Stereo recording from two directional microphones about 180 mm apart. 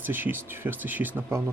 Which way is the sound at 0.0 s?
10° right (ahead or behind).